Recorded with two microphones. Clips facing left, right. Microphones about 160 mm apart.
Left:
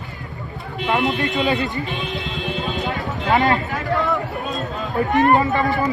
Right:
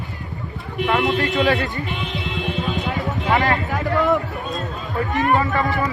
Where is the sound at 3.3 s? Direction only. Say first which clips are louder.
Left 2 dB; 20° left (ahead or behind).